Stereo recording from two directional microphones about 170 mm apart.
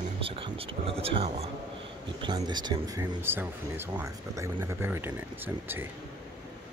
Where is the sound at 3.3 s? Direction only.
10° right (ahead or behind).